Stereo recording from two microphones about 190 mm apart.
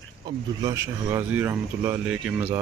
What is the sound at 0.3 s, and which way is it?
Speech, 25° right (ahead or behind).